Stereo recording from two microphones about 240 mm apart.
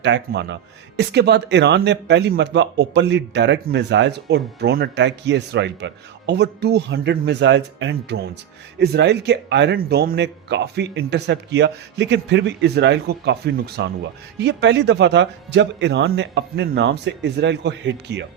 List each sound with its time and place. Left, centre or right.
0.0 s speech: right